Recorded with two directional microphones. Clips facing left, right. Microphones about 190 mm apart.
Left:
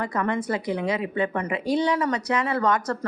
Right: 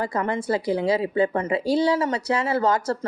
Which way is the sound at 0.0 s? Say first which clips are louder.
Right 1 dB; 30° right (ahead or behind).